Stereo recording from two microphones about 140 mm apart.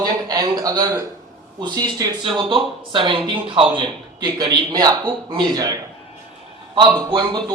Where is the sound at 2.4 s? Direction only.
35° right (ahead or behind).